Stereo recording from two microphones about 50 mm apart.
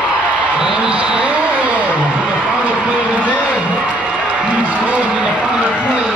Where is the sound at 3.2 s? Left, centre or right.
Left.